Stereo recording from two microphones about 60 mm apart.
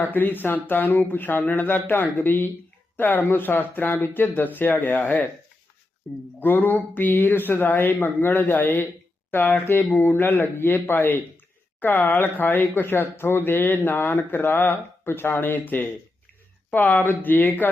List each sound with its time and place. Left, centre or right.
0.0 s speech: left
6.0 s speech: centre
6.4 s speech: left